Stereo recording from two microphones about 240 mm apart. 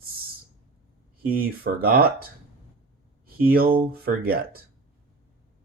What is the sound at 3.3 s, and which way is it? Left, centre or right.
Speech, right.